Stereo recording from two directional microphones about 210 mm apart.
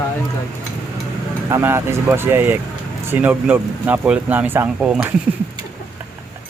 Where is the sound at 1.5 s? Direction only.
10° right (ahead or behind).